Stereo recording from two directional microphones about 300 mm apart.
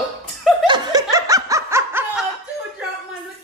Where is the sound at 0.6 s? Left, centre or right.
Centre.